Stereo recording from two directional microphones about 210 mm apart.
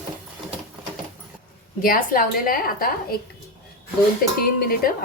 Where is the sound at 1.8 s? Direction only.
45° left (ahead or behind).